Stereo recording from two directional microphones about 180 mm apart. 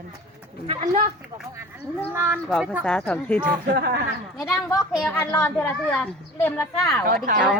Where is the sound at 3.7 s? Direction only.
60° right (ahead or behind).